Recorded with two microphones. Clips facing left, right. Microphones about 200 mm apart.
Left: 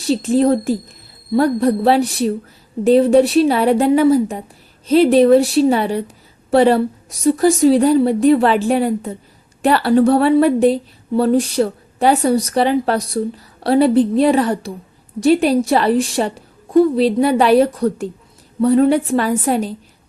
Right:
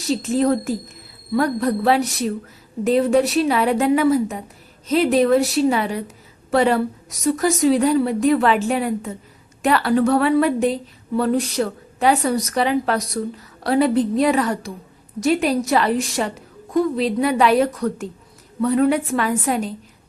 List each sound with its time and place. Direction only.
0.0 s a woman's voice: 30° left (ahead or behind)